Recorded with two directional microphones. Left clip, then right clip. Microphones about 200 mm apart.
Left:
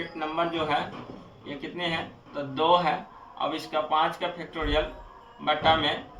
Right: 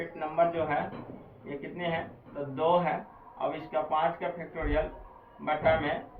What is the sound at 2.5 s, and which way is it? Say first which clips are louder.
A man's voice: left 4 dB; 30° left (ahead or behind).